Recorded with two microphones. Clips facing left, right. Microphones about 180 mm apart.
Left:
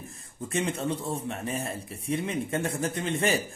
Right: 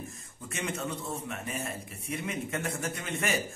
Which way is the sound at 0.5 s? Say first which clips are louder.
Left 6 dB; 30° left (ahead or behind).